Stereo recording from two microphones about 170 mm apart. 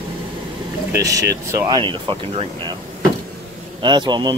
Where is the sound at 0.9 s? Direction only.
20° right (ahead or behind).